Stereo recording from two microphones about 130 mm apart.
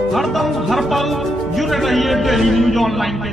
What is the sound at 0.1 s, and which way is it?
Speech, centre (ahead or behind).